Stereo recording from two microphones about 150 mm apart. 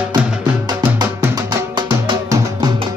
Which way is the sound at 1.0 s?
25° right (ahead or behind).